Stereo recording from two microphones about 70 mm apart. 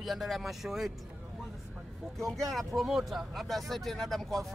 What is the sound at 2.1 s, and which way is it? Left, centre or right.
Speech, centre.